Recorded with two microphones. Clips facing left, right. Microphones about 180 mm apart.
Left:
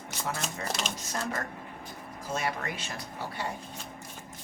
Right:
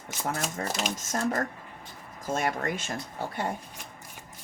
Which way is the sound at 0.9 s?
45° right (ahead or behind).